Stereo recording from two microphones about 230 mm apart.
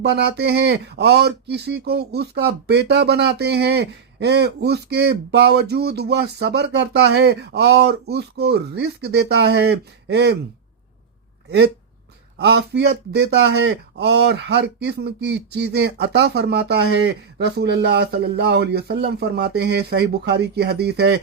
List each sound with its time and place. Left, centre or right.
0.0 s speech: right
11.4 s speech: right